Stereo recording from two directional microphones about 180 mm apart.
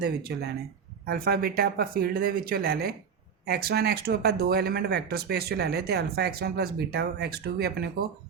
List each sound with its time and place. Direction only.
0.0 s speech: 60° right (ahead or behind)